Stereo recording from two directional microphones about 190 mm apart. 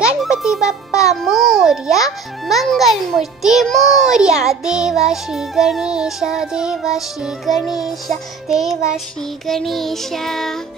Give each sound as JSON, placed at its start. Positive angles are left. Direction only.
{"t": 0.2, "sound": "music", "side_deg": -5}
{"t": 1.0, "sound": "a child's voice", "side_deg": 0}